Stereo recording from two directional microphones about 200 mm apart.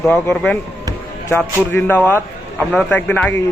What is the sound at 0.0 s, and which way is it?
Speech, 10° left (ahead or behind).